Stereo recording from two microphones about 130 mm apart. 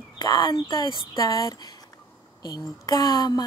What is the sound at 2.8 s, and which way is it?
Speech, 30° left (ahead or behind).